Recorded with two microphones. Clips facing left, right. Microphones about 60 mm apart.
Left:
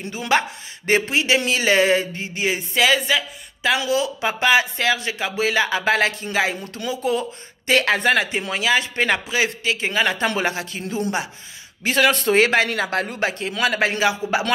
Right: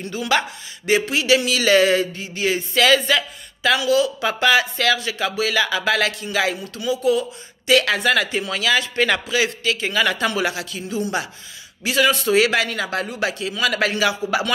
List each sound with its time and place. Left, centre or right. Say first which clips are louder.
0.2 s speech: left 1 dB; left; by 3.7 s centre
3.7 s speech: right 4 dB; left
11.8 s a man's voice: even; left
13.7 s speech: even; left